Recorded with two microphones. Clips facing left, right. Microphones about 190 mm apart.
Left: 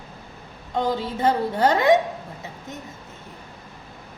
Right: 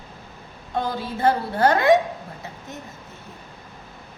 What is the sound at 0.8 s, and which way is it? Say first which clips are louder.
A woman's voice: left 1 dB; 20° left (ahead or behind).